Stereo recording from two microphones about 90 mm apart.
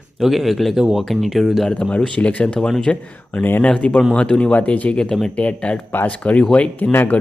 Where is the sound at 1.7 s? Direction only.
15° left (ahead or behind).